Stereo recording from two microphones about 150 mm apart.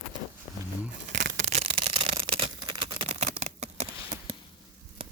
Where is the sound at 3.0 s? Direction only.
45° right (ahead or behind).